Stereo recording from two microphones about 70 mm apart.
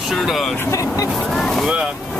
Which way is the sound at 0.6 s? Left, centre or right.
Left.